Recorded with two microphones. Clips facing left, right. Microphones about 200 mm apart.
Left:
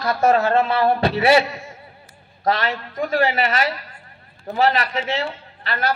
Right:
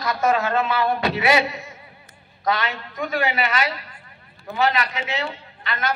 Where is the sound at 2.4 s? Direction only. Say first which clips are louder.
Left 3 dB; 30° left (ahead or behind).